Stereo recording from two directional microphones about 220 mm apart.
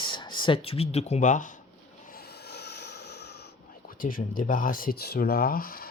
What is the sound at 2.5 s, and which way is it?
Vehicle, 50° left (ahead or behind).